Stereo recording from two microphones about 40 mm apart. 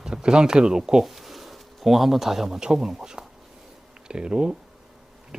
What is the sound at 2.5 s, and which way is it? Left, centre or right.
Speech, centre.